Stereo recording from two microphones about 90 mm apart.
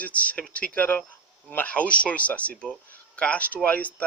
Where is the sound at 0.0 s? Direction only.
15° left (ahead or behind).